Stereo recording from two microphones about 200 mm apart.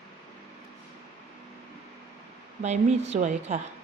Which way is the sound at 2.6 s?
35° right (ahead or behind).